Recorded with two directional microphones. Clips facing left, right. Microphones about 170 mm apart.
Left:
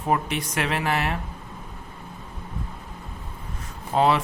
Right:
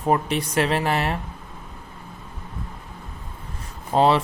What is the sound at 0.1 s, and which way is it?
Speech, 35° right (ahead or behind).